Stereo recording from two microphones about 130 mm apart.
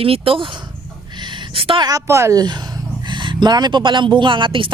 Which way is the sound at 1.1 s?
35° right (ahead or behind).